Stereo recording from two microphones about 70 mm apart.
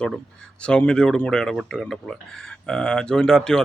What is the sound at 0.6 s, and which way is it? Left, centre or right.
Speech, centre.